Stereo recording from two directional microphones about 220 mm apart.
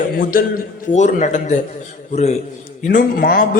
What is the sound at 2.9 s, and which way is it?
Speech, 40° left (ahead or behind).